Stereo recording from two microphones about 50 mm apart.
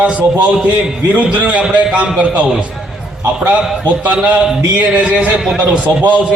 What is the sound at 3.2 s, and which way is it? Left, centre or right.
A man's voice, right.